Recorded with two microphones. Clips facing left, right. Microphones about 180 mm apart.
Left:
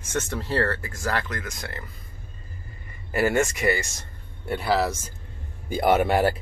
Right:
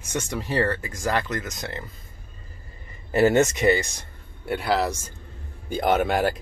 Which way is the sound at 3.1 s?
20° right (ahead or behind).